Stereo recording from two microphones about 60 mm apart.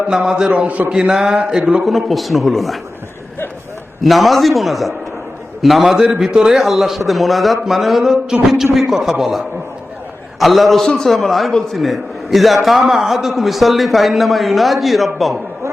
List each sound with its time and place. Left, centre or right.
0.2 s speech: centre
0.9 s speech: centre
1.9 s a man's voice: centre
4.0 s a man's voice: centre
10.4 s a man's voice: centre